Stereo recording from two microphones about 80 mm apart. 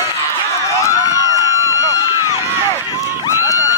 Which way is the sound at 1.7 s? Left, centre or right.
Left.